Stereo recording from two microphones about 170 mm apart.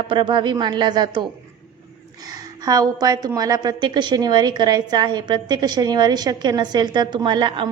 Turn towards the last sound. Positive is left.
turn(degrees=-30)  # may be behind; listen again after turning